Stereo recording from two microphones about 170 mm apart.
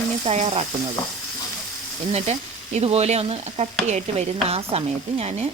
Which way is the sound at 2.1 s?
35° right (ahead or behind).